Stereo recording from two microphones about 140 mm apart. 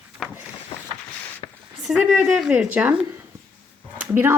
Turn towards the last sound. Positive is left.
turn(degrees=-15)  # may be behind; listen again after turning